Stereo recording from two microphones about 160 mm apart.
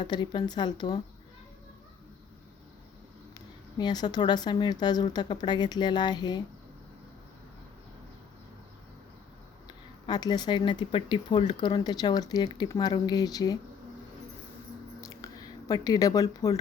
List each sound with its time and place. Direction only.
0.0 s speech: 25° left (ahead or behind)
3.8 s speech: 25° left (ahead or behind)
10.1 s speech: 25° left (ahead or behind)
15.0 s a sound: 20° left (ahead or behind)